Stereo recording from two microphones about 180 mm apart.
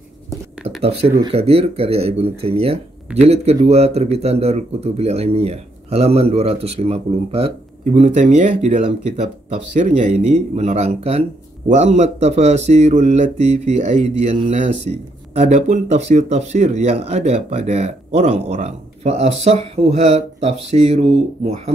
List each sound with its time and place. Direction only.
1.2 s speech: 35° right (ahead or behind)